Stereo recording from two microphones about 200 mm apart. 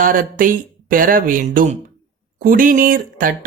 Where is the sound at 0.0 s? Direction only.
45° right (ahead or behind).